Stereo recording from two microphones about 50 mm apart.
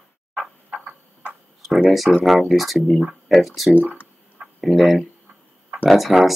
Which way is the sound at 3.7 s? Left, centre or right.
Right.